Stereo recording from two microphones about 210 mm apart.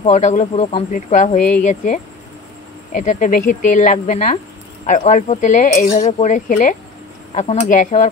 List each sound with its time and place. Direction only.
0.0 s speech: 35° left (ahead or behind)
3.0 s speech: 35° left (ahead or behind)